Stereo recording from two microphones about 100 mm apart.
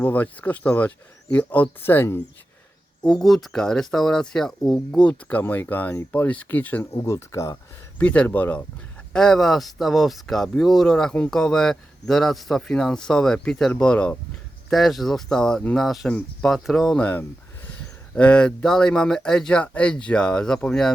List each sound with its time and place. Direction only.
0.0 s speech: 15° left (ahead or behind)
3.1 s speech: centre (ahead or behind)
5.0 s speech: 15° left (ahead or behind)
6.9 s speech: 30° left (ahead or behind)
8.0 s speech: 15° left (ahead or behind)
9.1 s speech: 5° left (ahead or behind)
17.0 s speech: 20° left (ahead or behind)